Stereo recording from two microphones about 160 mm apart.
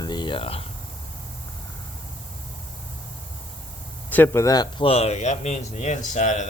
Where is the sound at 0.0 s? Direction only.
25° left (ahead or behind).